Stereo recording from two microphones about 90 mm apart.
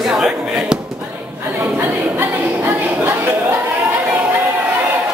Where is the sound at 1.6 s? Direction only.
20° right (ahead or behind).